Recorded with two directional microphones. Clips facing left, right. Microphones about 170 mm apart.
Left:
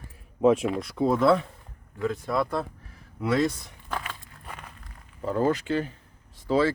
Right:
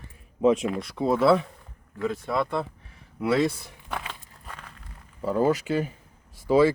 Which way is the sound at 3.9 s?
20° right (ahead or behind).